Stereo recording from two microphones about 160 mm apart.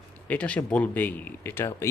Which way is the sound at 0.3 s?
10° left (ahead or behind).